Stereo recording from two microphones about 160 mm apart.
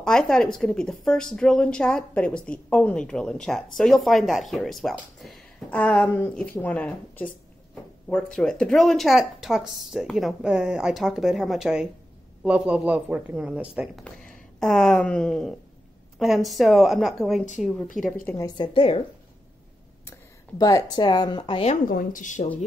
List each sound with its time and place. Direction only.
0.0 s a woman's voice: 5° left (ahead or behind)
14.0 s a woman's voice: 5° left (ahead or behind)
18.2 s a woman's voice: 15° left (ahead or behind)
18.6 s a woman's voice: 35° left (ahead or behind)
20.1 s speech: 20° left (ahead or behind)
21.8 s speech: 60° left (ahead or behind)